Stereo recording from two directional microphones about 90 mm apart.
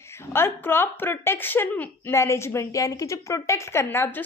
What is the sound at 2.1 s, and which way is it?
A woman's voice, 30° left (ahead or behind).